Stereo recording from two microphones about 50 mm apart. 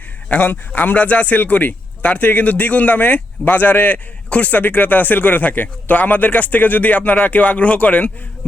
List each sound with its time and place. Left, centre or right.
0.3 s a man's voice: left